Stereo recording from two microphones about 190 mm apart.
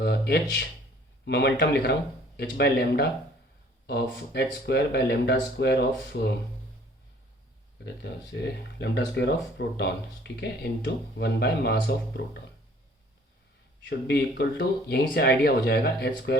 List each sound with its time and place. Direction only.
0.0 s speech: 60° left (ahead or behind)
7.9 s speech: 60° left (ahead or behind)
14.1 s speech: 60° left (ahead or behind)